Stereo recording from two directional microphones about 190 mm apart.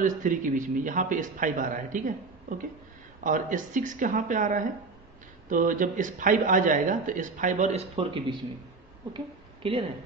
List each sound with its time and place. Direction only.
0.0 s speech: 40° right (ahead or behind)
3.3 s speech: 45° right (ahead or behind)